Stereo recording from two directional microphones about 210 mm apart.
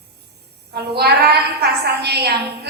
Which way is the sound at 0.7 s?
50° right (ahead or behind).